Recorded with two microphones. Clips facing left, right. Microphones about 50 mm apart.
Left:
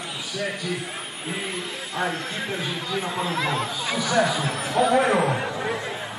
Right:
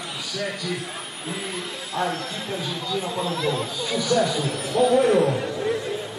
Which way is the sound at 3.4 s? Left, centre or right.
Left.